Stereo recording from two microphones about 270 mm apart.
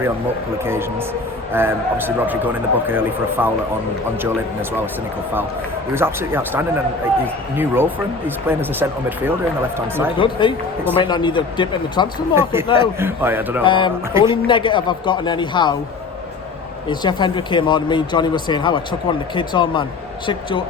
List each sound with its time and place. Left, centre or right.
0.6 s a man's voice: centre
5.9 s a man's voice: centre
10.2 s speech: centre
12.3 s a man's voice: centre
12.6 s speech: centre
13.0 s a man's voice: centre
13.7 s speech: centre
14.1 s a man's voice: centre
14.4 s speech: centre
16.9 s speech: centre